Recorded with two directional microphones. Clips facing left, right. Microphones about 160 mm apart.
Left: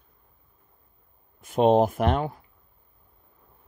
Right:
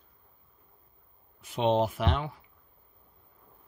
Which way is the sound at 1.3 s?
50° left (ahead or behind).